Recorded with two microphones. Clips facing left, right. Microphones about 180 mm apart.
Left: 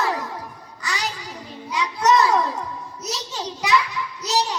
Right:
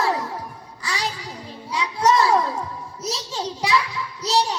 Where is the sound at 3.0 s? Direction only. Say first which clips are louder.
Right 3 dB; 30° right (ahead or behind).